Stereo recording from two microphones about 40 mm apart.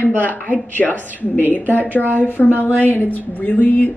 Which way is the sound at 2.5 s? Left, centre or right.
Left.